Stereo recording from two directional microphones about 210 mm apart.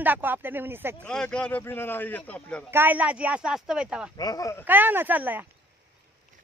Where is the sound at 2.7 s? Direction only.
10° right (ahead or behind).